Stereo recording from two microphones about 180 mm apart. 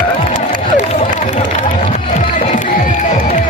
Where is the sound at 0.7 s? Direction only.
40° left (ahead or behind).